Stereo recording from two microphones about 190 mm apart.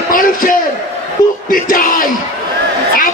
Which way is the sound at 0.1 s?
45° left (ahead or behind).